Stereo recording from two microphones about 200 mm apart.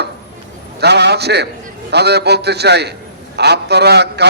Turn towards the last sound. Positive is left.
turn(degrees=-55)  # may be behind; listen again after turning